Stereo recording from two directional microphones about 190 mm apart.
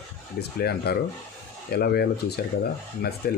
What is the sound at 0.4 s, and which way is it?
Speech, 55° left (ahead or behind).